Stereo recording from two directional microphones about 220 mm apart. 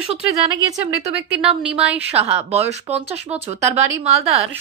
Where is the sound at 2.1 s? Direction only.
30° right (ahead or behind).